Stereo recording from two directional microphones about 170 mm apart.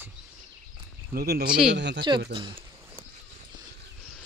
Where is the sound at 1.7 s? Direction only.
85° right.